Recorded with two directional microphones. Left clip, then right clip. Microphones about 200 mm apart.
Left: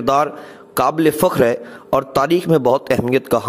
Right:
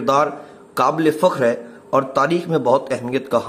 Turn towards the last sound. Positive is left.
turn(degrees=40)  # may be behind; listen again after turning